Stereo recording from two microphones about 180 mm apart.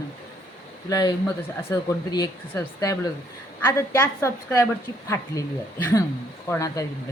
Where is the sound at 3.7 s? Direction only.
15° left (ahead or behind).